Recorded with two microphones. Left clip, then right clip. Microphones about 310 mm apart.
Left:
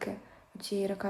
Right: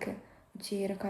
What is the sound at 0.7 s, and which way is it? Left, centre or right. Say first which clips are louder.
Speech: left 2 dB; centre.